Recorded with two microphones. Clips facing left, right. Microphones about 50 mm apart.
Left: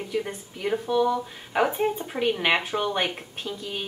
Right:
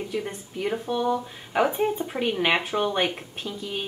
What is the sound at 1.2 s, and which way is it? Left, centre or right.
A woman's voice, centre.